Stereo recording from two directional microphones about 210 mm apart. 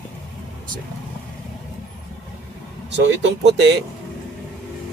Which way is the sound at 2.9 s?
55° right (ahead or behind).